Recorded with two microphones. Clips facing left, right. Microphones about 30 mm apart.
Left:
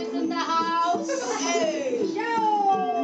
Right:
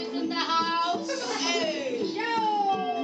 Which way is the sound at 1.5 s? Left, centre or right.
Right.